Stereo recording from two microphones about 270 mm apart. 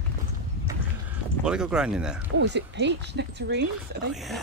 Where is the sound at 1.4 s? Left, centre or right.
Centre.